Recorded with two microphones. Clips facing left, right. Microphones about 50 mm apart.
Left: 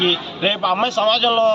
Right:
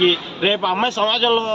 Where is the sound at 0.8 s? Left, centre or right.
Right.